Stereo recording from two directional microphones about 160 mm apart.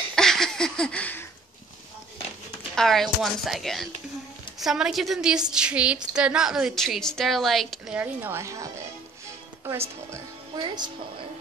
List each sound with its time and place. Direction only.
0.1 s a sound: 5° left (ahead or behind)
2.7 s a woman's voice: centre (ahead or behind); by 8.6 s 20° right (ahead or behind)
9.7 s speech: 20° right (ahead or behind)